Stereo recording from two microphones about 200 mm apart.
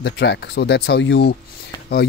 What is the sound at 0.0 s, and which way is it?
Speech, 60° left (ahead or behind).